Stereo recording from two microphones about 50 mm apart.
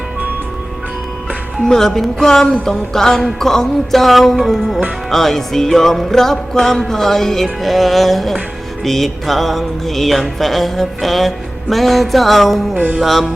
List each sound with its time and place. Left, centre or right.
1.6 s music: centre
12.7 s music: right
13.0 s music: centre